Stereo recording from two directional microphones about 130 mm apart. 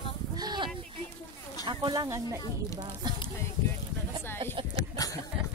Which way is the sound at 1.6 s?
35° right (ahead or behind).